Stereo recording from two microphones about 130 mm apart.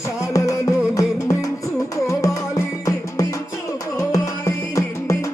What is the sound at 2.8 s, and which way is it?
Music, 25° left (ahead or behind).